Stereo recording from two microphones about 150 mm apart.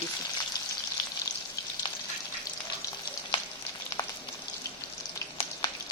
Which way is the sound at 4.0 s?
25° left (ahead or behind).